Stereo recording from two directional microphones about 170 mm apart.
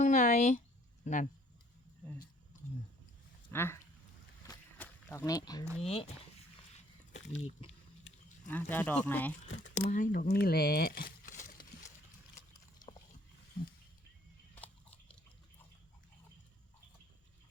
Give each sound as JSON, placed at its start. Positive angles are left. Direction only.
{"t": 0.0, "sound": "a sound", "side_deg": 45}
{"t": 1.0, "sound": "speech", "side_deg": 45}
{"t": 3.5, "sound": "speech", "side_deg": 15}
{"t": 4.8, "sound": "a sound", "side_deg": 10}
{"t": 5.2, "sound": "speech", "side_deg": 20}
{"t": 5.8, "sound": "speech", "side_deg": 35}
{"t": 7.3, "sound": "speech", "side_deg": 40}
{"t": 8.4, "sound": "speech", "side_deg": 10}
{"t": 9.7, "sound": "speech", "side_deg": 45}
{"t": 10.3, "sound": "speech", "side_deg": 65}
{"t": 14.5, "sound": "a sound", "side_deg": 10}